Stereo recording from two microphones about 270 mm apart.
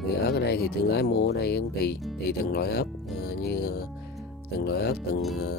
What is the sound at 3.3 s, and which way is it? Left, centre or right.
Music, left.